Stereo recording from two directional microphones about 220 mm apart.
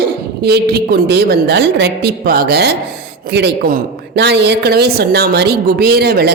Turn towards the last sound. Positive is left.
turn(degrees=-45)  # may be behind; listen again after turning